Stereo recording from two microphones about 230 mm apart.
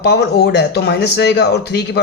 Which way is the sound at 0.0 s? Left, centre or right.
Left.